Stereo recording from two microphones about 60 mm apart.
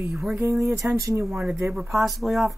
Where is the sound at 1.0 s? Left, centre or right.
Right.